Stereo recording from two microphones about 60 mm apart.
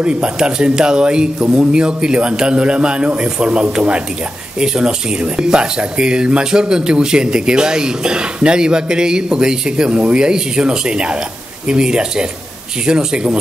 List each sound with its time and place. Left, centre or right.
0.0 s speech: centre